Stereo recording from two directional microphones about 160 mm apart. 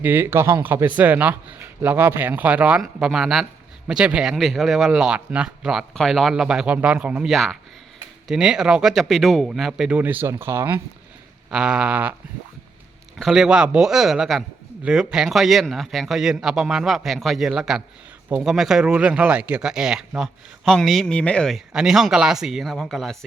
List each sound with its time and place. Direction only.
0.0 s a man's voice: 15° right (ahead or behind)
11.5 s a man's voice: 5° right (ahead or behind)
13.1 s speech: centre (ahead or behind)